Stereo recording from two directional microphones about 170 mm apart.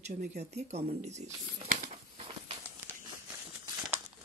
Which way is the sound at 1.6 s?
45° right (ahead or behind).